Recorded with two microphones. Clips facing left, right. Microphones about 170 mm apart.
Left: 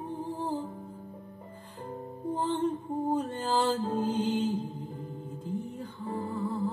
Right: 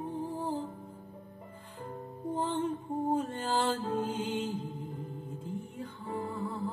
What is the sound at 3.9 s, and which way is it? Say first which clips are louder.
Music: left 4 dB; 35° left (ahead or behind).